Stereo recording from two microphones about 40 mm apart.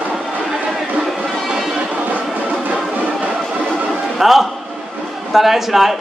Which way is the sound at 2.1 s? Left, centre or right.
Right.